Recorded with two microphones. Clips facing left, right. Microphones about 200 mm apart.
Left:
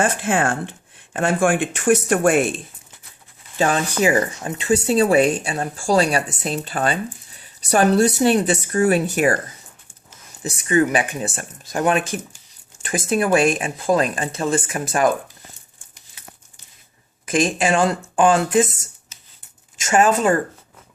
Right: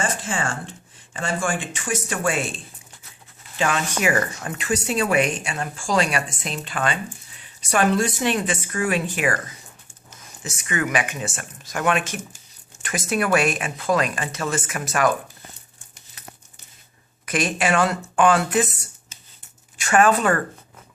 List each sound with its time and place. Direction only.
0.0 s speech: 60° left (ahead or behind)
3.6 s speech: 35° left (ahead or behind)
10.7 s speech: 35° left (ahead or behind)
17.3 s speech: 30° left (ahead or behind)
19.9 s speech: 25° left (ahead or behind)